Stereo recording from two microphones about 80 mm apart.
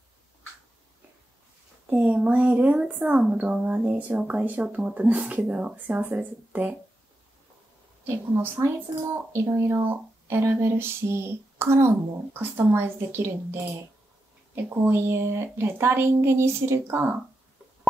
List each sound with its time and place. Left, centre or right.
1.9 s speech: centre
8.1 s speech: right